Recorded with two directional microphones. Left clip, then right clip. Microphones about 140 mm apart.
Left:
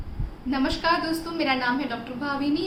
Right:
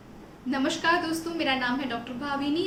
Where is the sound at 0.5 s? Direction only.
15° left (ahead or behind).